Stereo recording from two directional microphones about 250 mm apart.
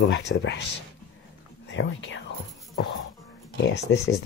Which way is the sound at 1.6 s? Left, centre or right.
Left.